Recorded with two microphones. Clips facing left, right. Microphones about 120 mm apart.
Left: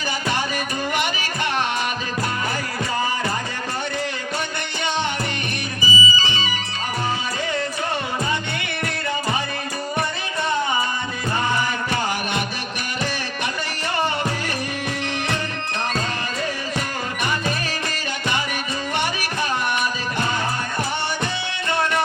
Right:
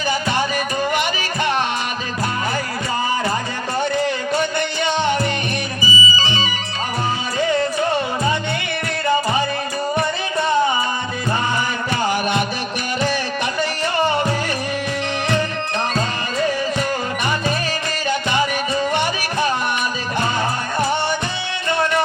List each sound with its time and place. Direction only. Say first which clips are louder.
5.8 s music: even; 50° left (ahead or behind)